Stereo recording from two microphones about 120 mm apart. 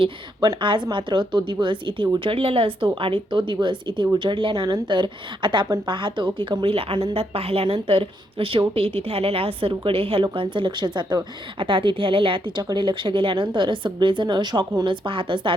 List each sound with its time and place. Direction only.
0.0 s a woman's voice: 45° right (ahead or behind)